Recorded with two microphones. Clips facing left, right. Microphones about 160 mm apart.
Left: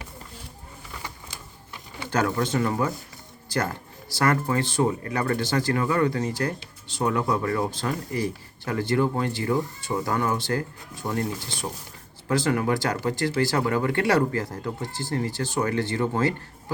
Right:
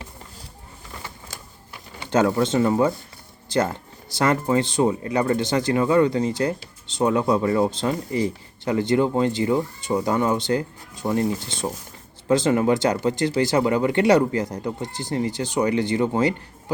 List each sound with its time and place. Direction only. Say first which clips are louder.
2.0 s speech: right 5 dB; 20° right (ahead or behind)